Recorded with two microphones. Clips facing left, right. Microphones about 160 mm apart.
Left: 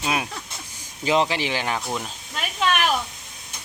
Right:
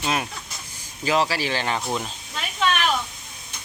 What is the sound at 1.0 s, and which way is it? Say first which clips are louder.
Speech: left 1 dB; 20° left (ahead or behind).